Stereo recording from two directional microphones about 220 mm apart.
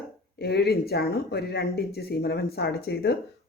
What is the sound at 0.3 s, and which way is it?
Speech, 50° left (ahead or behind).